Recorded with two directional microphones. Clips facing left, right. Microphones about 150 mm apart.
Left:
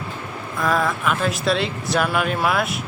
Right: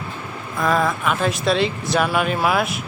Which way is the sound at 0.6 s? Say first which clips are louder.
Right 1 dB; centre (ahead or behind).